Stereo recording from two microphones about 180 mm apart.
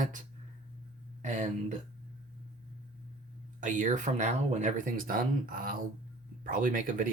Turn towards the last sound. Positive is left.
turn(degrees=-50)  # may be behind; listen again after turning